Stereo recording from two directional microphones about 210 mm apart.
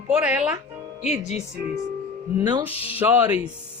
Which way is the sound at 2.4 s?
20° right (ahead or behind).